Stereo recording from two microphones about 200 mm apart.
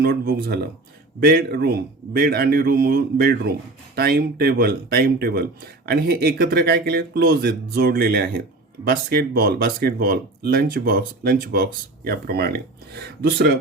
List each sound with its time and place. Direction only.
0.0 s speech: 50° right (ahead or behind)